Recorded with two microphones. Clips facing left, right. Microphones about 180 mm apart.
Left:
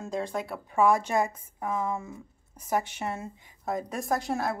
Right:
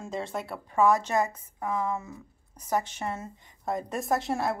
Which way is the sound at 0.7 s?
10° left (ahead or behind).